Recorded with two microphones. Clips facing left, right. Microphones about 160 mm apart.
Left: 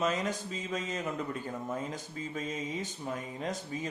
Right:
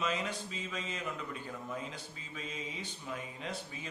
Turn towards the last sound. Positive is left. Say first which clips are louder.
# left 6 dB
turn(degrees=40)  # may be behind; listen again after turning